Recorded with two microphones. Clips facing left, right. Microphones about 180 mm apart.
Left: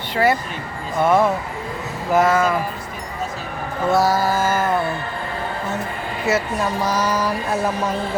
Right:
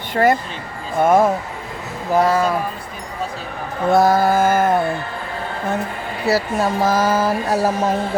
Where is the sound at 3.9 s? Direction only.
55° right (ahead or behind).